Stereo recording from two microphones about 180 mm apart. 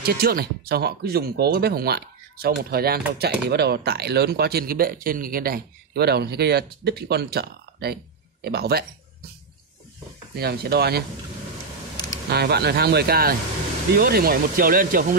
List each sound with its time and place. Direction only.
0.0 s speech: 55° right (ahead or behind)
10.3 s speech: 60° right (ahead or behind)
12.3 s speech: 65° right (ahead or behind)